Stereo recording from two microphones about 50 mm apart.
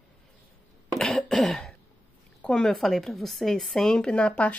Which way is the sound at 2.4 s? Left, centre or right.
Centre.